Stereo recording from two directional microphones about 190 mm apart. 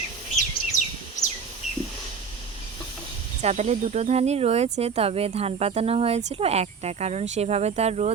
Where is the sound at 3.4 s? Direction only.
35° right (ahead or behind).